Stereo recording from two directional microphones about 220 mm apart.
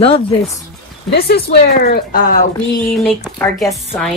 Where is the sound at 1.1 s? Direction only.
45° left (ahead or behind).